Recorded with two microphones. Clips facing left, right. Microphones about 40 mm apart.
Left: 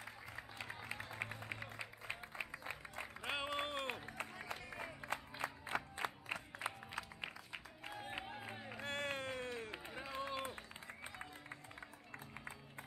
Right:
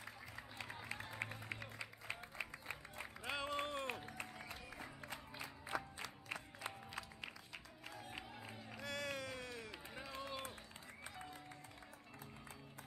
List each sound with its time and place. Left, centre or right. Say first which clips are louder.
0.4 s a sound: left 2 dB; centre
0.9 s music: left 1 dB; centre
3.5 s run: left 1 dB; left
4.0 s a sound: left 2 dB; centre
5.4 s music: left 8 dB; left
5.9 s music: left 5 dB; left
7.9 s crowd: left 5 dB; left
9.9 s run: left 4 dB; centre